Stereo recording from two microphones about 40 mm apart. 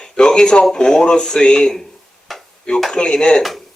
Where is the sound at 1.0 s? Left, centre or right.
Centre.